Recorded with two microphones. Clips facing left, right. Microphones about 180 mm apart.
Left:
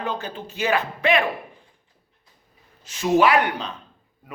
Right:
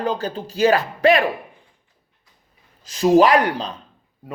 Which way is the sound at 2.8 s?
35° right (ahead or behind).